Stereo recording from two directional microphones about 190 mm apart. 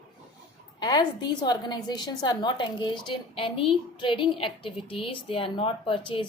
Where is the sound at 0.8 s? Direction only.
20° left (ahead or behind).